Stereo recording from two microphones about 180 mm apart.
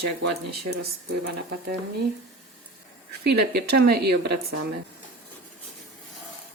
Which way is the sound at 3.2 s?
65° right (ahead or behind).